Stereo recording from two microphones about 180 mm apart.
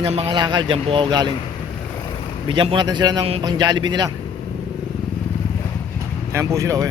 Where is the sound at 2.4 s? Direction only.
25° right (ahead or behind).